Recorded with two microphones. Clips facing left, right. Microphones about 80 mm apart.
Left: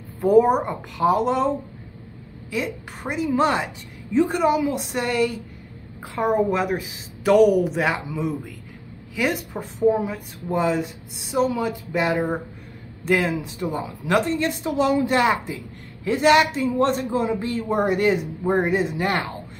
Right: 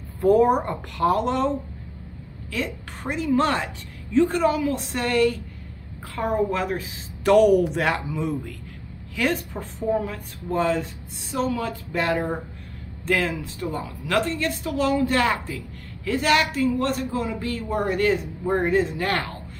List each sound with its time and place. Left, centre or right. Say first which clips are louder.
0.2 s speech: left 1 dB; centre
2.5 s speech: left 2 dB; centre
7.2 s speech: even; centre